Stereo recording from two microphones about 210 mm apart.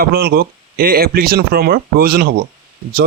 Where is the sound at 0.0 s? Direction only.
45° right (ahead or behind).